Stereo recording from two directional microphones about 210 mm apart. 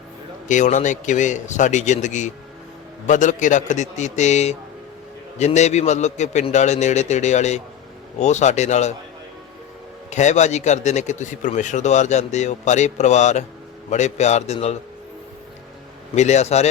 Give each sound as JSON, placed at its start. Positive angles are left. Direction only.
{"t": 0.4, "sound": "a man's voice", "side_deg": 35}
{"t": 10.1, "sound": "a man's voice", "side_deg": 35}
{"t": 16.1, "sound": "a man's voice", "side_deg": 35}